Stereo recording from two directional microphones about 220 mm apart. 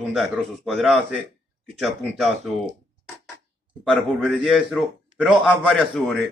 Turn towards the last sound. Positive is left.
turn(degrees=0)  # may be behind; listen again after turning